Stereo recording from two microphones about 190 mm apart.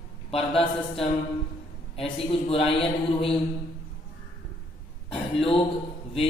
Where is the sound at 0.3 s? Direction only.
30° left (ahead or behind).